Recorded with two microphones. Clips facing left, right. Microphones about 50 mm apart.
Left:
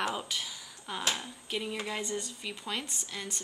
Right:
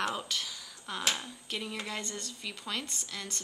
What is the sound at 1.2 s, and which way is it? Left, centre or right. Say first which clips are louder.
Speech: left 2 dB; centre.